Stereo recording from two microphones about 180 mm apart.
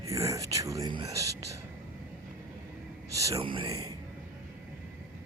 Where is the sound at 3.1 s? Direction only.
20° right (ahead or behind).